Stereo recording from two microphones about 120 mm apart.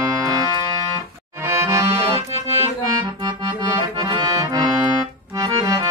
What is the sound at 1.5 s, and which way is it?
Accordion, 25° right (ahead or behind).